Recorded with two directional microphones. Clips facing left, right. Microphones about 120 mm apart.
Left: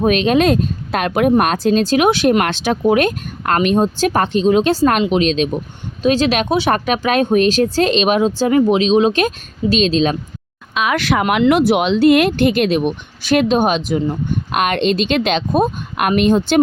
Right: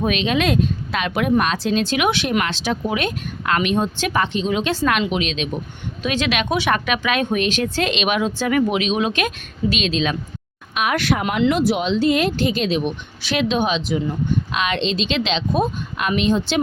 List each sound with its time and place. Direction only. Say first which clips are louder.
0.0 s speech: left 6 dB; 45° left (ahead or behind)
2.4 s speech: left 6 dB; 55° left (ahead or behind)
10.9 s speech: left 5 dB; 90° left; by 16.6 s 55° left (ahead or behind)